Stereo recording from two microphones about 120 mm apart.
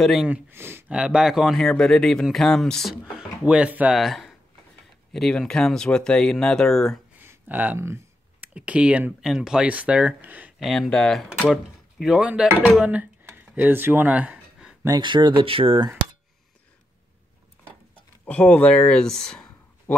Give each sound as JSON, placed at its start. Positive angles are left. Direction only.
{"t": 0.0, "sound": "speech", "side_deg": 0}
{"t": 0.3, "sound": "speech", "side_deg": -20}
{"t": 0.9, "sound": "speech", "side_deg": -5}
{"t": 7.2, "sound": "speech", "side_deg": -15}
{"t": 10.6, "sound": "speech", "side_deg": 0}
{"t": 13.5, "sound": "a sound", "side_deg": -15}
{"t": 15.0, "sound": "speech", "side_deg": -40}
{"t": 18.2, "sound": "speech", "side_deg": 10}